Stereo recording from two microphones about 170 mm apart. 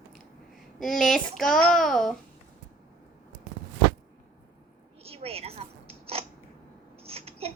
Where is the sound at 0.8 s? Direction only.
Centre (ahead or behind).